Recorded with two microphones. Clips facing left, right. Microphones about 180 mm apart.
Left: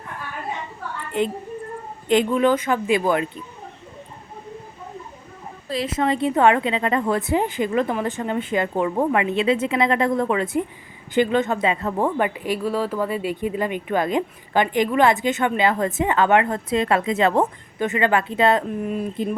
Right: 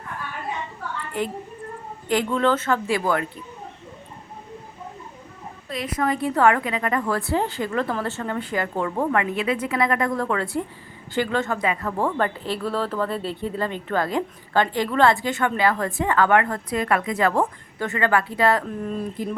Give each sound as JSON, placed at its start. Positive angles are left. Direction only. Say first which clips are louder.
{"t": 1.2, "sound": "speech", "louder": "left 5 dB", "side_deg": 20}
{"t": 5.6, "sound": "speech", "louder": "left 3 dB", "side_deg": 30}